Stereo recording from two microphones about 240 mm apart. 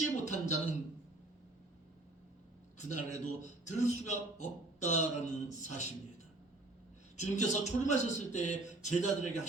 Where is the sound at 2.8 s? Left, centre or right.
Left.